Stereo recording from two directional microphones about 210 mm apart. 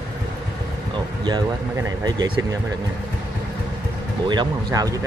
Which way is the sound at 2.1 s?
15° right (ahead or behind).